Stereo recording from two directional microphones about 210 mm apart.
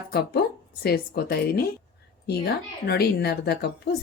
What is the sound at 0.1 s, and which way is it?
Speech, 50° left (ahead or behind).